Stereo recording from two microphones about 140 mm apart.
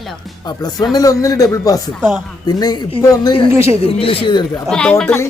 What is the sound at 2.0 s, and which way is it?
Speech, 15° right (ahead or behind).